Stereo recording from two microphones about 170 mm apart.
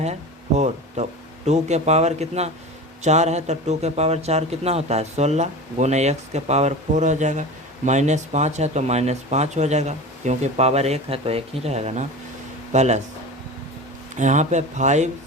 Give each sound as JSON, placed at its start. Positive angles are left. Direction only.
{"t": 1.0, "sound": "a man's voice", "side_deg": -45}
{"t": 14.2, "sound": "speech", "side_deg": -45}